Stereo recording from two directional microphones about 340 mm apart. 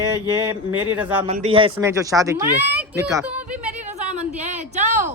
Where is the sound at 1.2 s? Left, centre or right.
Centre.